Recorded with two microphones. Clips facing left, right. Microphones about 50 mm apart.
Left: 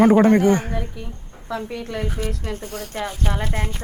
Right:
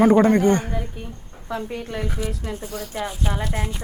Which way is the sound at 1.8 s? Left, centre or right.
Left.